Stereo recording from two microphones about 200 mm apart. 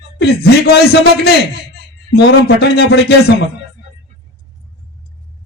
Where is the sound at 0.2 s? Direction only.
55° left (ahead or behind).